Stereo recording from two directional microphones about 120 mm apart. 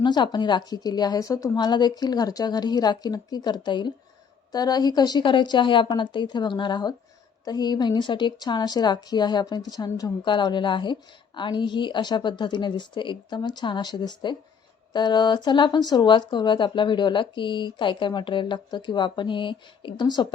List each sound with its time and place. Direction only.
0.0 s speech: 40° left (ahead or behind)